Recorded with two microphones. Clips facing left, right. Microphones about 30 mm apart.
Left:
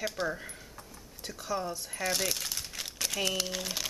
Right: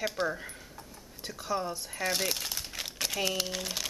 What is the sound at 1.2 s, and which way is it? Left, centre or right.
Crumpling, centre.